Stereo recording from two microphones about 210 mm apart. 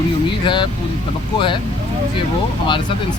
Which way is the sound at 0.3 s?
25° left (ahead or behind).